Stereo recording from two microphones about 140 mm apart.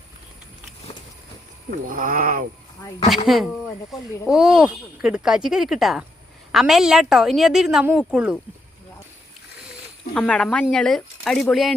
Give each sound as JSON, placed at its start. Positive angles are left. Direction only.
{"t": 1.9, "sound": "speech", "side_deg": -80}
{"t": 3.2, "sound": "speech", "side_deg": 0}
{"t": 10.2, "sound": "speech", "side_deg": 5}